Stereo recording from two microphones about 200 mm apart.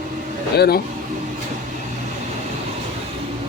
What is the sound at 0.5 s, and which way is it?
Speech, 55° left (ahead or behind).